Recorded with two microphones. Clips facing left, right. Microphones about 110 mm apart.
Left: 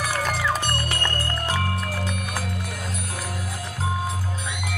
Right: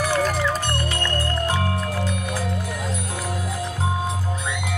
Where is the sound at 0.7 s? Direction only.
25° right (ahead or behind).